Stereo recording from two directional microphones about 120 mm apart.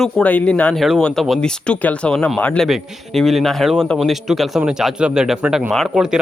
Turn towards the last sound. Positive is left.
turn(degrees=-5)  # may be behind; listen again after turning